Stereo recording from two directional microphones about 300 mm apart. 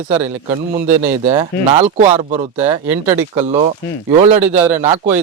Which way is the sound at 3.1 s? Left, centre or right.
Right.